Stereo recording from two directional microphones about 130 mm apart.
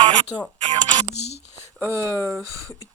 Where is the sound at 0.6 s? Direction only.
35° right (ahead or behind).